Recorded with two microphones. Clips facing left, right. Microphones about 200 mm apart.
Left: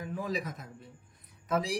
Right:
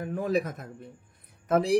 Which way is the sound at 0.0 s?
55° right (ahead or behind).